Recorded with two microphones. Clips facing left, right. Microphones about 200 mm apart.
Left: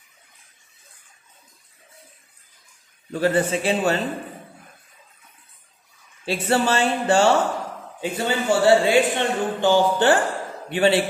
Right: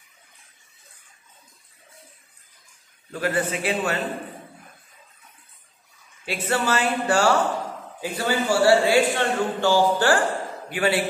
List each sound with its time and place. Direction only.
3.1 s a man's voice: 30° left (ahead or behind)
6.2 s a man's voice: 30° left (ahead or behind)